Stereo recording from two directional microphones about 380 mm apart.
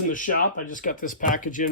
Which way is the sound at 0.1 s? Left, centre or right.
Centre.